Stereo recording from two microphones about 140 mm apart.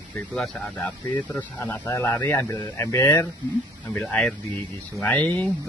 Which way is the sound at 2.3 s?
25° left (ahead or behind).